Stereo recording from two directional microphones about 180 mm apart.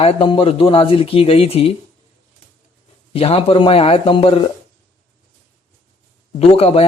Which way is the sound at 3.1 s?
35° left (ahead or behind).